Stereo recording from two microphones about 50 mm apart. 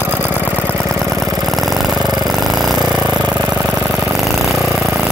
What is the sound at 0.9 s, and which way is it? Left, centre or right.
Engine, centre.